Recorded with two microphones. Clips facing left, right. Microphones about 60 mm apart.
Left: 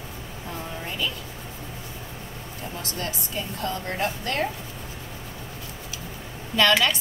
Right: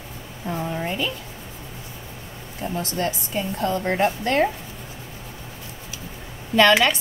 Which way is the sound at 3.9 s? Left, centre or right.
Right.